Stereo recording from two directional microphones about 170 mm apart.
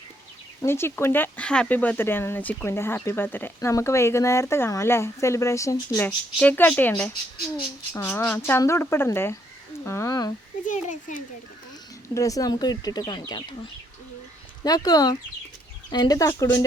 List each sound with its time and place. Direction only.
0.6 s speech: 15° left (ahead or behind)
12.1 s speech: 20° left (ahead or behind)
14.6 s speech: 20° left (ahead or behind)